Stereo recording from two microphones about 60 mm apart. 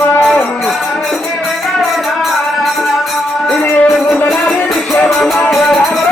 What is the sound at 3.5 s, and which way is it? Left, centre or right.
Music, centre.